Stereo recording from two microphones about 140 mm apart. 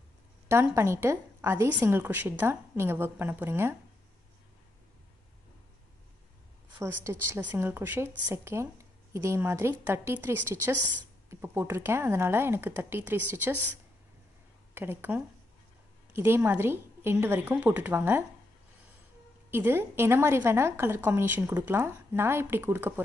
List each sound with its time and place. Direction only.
0.7 s a woman's voice: 20° right (ahead or behind)
6.8 s a woman's voice: 20° right (ahead or behind)
14.7 s a woman's voice: 15° right (ahead or behind)
19.5 s a woman's voice: 15° right (ahead or behind)